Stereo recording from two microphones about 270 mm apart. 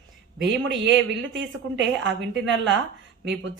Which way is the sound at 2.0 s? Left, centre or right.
Right.